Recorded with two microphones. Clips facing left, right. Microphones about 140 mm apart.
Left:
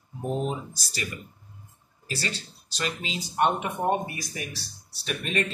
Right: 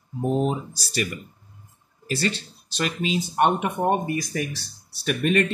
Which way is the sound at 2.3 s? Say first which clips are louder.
Right 6 dB; 55° right (ahead or behind).